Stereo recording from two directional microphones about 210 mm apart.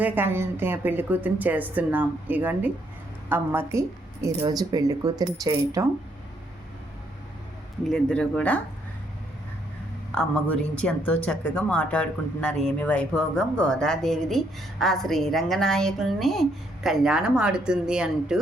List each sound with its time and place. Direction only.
0.0 s a woman's voice: 10° right (ahead or behind)
7.9 s a woman's voice: 5° left (ahead or behind)
10.1 s a woman's voice: 5° left (ahead or behind)